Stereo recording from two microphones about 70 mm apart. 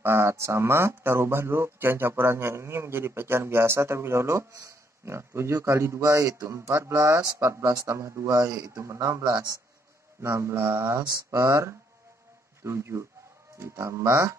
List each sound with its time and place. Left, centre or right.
0.0 s speech: right
5.0 s speech: right
6.0 s speech: right
6.5 s speech: right
7.8 s speech: right
10.2 s speech: right
11.2 s speech: right